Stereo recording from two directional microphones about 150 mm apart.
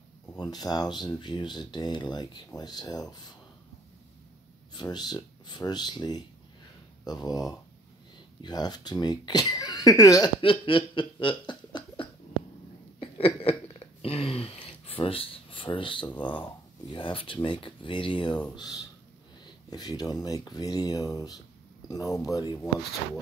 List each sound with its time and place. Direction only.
0.4 s speech: 25° left (ahead or behind)
4.7 s speech: 30° left (ahead or behind)
10.4 s a sound: 35° left (ahead or behind)
14.0 s speech: 40° left (ahead or behind)
19.4 s speech: 25° left (ahead or behind)